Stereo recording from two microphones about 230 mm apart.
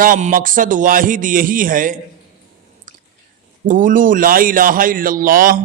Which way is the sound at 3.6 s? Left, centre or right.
Right.